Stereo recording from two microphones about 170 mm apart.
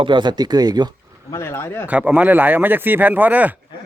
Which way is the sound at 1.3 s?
15° left (ahead or behind).